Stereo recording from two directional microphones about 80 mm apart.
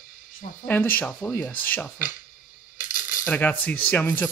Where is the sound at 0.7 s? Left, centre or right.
Left.